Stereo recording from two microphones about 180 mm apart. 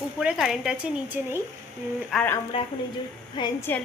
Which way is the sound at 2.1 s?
10° left (ahead or behind).